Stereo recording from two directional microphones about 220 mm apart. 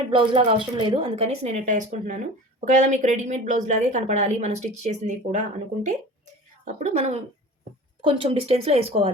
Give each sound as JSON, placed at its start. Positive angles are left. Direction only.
{"t": 0.1, "sound": "a woman's voice", "side_deg": -20}